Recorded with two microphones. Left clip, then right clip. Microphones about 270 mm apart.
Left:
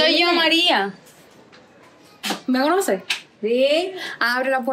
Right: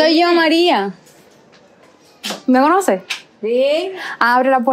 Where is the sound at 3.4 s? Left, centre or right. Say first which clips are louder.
Right 3 dB; centre.